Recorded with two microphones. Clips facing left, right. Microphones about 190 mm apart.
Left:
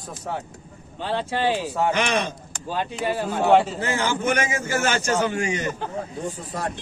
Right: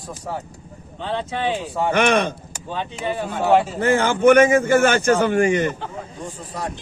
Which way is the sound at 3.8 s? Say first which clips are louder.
Right 8 dB; 55° right (ahead or behind).